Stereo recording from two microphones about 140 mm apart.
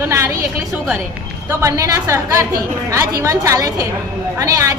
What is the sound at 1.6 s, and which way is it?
A woman's voice, 20° right (ahead or behind).